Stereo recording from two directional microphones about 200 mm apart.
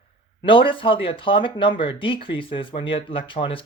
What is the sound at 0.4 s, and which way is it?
Speech, 25° left (ahead or behind).